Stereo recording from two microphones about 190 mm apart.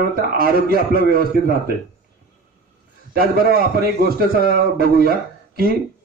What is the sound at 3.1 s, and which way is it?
A man's voice, 50° right (ahead or behind).